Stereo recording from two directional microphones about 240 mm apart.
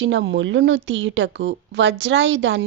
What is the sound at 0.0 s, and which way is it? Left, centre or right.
Speech, right.